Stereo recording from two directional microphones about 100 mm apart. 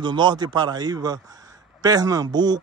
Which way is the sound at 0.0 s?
50° right (ahead or behind).